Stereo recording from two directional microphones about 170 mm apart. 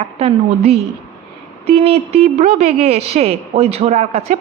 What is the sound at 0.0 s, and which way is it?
A woman's voice, 35° right (ahead or behind).